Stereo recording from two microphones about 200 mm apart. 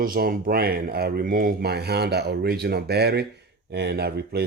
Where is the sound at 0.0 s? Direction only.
45° right (ahead or behind).